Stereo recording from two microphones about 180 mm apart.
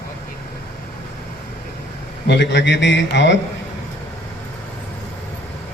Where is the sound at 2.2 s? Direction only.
70° left (ahead or behind).